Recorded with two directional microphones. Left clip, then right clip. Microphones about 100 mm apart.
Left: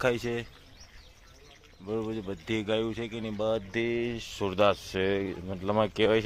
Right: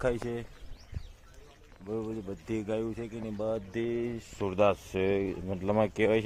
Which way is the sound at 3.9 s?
20° left (ahead or behind).